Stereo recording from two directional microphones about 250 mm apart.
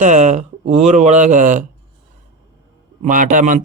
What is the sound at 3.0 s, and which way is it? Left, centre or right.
Speech, right.